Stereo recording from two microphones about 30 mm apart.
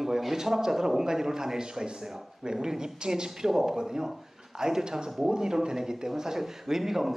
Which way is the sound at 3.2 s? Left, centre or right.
Centre.